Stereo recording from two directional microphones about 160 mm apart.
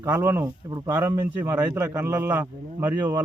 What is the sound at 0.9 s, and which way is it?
A man's voice, 15° right (ahead or behind).